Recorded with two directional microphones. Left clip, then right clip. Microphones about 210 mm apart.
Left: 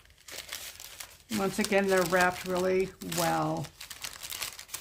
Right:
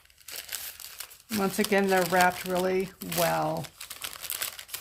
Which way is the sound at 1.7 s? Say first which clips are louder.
Right 1 dB; 25° right (ahead or behind).